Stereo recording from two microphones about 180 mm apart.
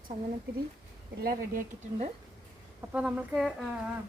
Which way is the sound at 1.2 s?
55° right (ahead or behind).